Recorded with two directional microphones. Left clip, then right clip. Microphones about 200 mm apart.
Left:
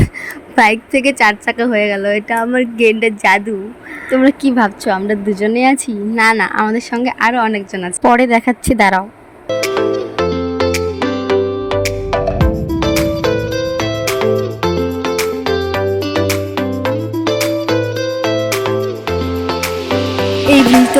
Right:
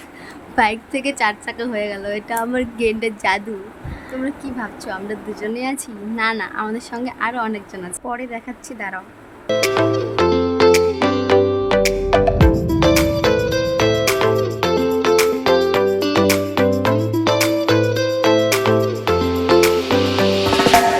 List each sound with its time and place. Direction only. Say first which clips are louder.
0.5 s a woman's voice: left 7 dB; 30° left (ahead or behind)
4.1 s a woman's voice: left 15 dB; 40° left (ahead or behind)
8.0 s a woman's voice: left 18 dB; 45° left (ahead or behind)
9.5 s music: left 1 dB; centre (ahead or behind)